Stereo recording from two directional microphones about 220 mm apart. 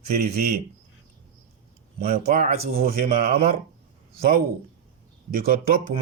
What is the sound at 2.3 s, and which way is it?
Speech, 30° right (ahead or behind).